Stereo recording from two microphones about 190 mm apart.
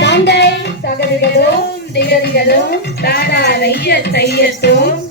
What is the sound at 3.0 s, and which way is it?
Music, 55° left (ahead or behind).